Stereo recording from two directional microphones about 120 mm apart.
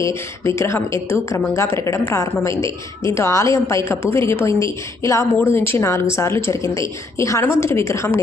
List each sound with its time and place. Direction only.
0.0 s speech: 25° left (ahead or behind)